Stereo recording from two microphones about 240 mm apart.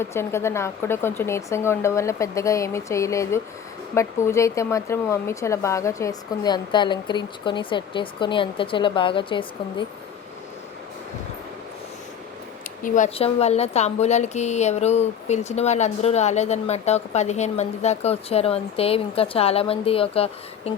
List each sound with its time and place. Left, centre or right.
0.0 s a woman's voice: centre
12.8 s a woman's voice: left